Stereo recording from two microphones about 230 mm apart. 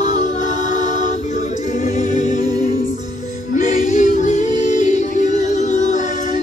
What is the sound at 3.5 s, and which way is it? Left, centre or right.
Music, left.